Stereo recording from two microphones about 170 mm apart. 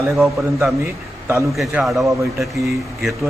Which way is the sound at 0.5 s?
15° right (ahead or behind).